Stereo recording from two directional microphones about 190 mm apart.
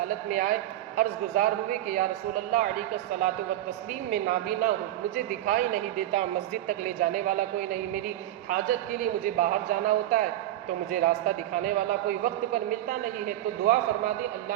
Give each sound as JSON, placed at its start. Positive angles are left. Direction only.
{"t": 0.3, "sound": "a man's voice", "side_deg": -45}